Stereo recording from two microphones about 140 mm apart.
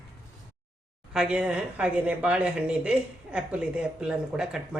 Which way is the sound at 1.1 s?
5° right (ahead or behind).